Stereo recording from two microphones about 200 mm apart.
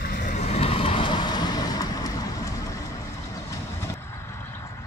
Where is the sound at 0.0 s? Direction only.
45° left (ahead or behind).